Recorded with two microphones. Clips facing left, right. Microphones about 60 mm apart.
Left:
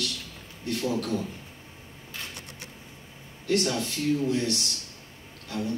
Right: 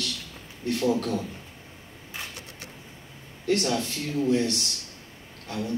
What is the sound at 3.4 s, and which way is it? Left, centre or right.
A man's voice, right.